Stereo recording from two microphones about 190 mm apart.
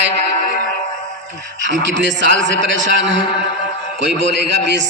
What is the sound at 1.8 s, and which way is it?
A man's voice, 70° right (ahead or behind).